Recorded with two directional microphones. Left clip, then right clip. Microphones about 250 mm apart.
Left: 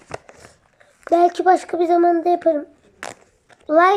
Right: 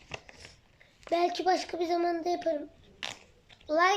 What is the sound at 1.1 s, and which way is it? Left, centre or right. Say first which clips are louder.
Child singing: left 13 dB; centre.